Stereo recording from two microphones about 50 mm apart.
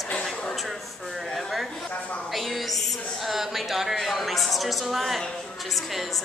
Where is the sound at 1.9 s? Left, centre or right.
Left.